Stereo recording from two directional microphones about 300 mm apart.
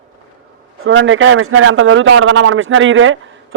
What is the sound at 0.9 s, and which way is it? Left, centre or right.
A man's voice, right.